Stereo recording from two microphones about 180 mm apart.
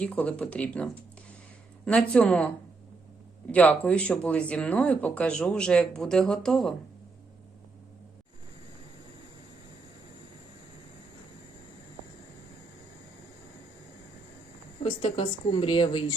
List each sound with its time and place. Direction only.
0.0 s speech: 5° left (ahead or behind)
3.5 s speech: 10° left (ahead or behind)
14.8 s speech: 30° left (ahead or behind)